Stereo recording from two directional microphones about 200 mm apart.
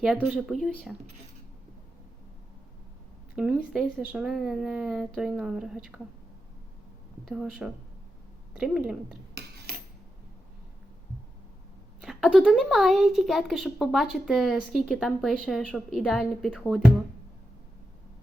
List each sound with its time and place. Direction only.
0.0 s speech: centre (ahead or behind)
3.3 s speech: 5° right (ahead or behind)
7.3 s speech: centre (ahead or behind)
9.3 s cutlery: 50° right (ahead or behind)
12.0 s speech: centre (ahead or behind)